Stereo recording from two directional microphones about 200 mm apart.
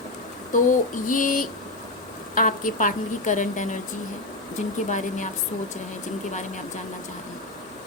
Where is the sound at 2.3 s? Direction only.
45° left (ahead or behind).